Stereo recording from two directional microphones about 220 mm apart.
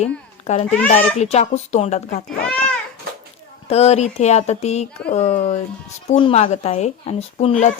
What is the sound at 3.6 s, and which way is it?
Speech, 30° left (ahead or behind).